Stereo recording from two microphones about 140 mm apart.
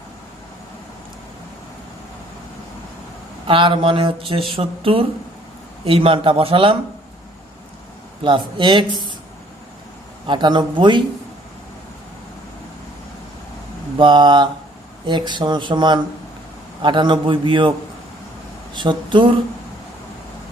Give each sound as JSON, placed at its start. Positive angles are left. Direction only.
{"t": 3.4, "sound": "speech", "side_deg": -35}
{"t": 8.2, "sound": "speech", "side_deg": -35}
{"t": 10.2, "sound": "speech", "side_deg": -35}
{"t": 14.0, "sound": "speech", "side_deg": -35}